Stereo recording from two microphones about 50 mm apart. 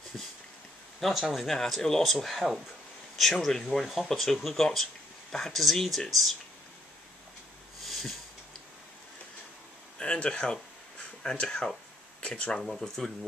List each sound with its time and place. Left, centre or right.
1.3 s speech: centre
7.8 s a sound: centre
9.9 s speech: centre
12.6 s speech: centre